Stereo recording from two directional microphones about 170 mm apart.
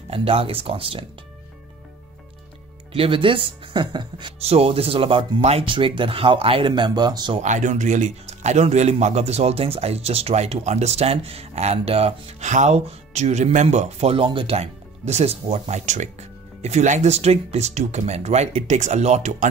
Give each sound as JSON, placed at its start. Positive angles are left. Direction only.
{"t": 0.1, "sound": "a man's voice", "side_deg": -35}
{"t": 2.9, "sound": "a man's voice", "side_deg": -30}
{"t": 7.3, "sound": "a man's voice", "side_deg": -45}